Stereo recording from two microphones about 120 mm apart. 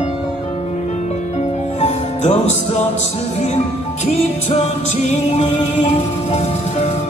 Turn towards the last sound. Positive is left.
turn(degrees=65)  # may be behind; listen again after turning